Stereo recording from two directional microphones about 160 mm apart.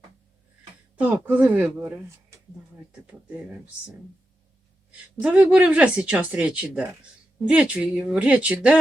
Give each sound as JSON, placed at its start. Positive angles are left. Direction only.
{"t": 0.9, "sound": "speech", "side_deg": -10}
{"t": 4.9, "sound": "speech", "side_deg": -5}